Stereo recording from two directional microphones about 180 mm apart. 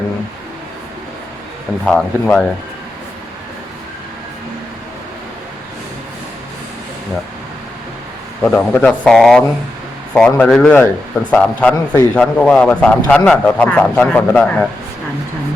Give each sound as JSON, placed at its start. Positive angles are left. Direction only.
{"t": 1.9, "sound": "speech", "side_deg": 5}
{"t": 8.4, "sound": "speech", "side_deg": 5}